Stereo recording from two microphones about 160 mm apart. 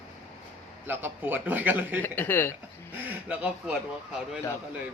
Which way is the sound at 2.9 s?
10° right (ahead or behind).